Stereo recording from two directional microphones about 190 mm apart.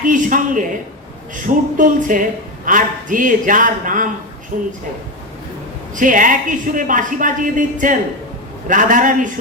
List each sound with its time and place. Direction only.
0.0 s a woman's voice: 45° right (ahead or behind)
5.9 s a woman's voice: 45° right (ahead or behind)